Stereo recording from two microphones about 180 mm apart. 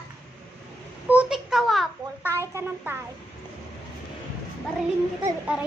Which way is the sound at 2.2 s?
15° right (ahead or behind).